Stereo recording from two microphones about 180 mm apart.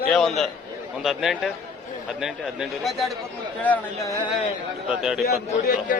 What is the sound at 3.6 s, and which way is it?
Speech, 10° left (ahead or behind).